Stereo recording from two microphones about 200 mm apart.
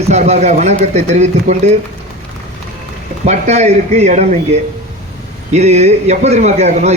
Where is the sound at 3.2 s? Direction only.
35° right (ahead or behind).